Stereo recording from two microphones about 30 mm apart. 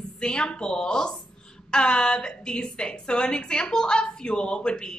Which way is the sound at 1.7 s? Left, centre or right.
Left.